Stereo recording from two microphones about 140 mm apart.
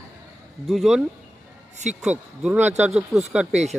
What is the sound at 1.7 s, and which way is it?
Speech, 55° right (ahead or behind).